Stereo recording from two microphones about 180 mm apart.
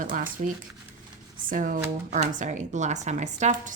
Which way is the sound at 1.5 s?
50° right (ahead or behind).